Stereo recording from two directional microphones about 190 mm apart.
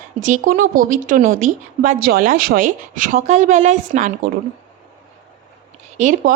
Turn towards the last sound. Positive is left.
turn(degrees=-40)  # may be behind; listen again after turning